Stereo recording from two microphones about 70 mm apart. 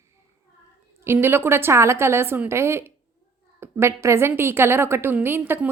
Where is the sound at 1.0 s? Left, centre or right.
Right.